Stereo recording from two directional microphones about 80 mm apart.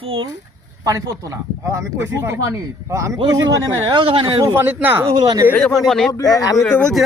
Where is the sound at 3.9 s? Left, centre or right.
Right.